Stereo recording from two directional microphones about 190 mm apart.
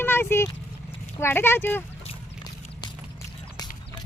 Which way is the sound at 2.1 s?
25° left (ahead or behind).